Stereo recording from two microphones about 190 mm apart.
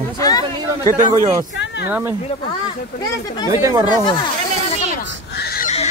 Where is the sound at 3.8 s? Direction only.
25° left (ahead or behind).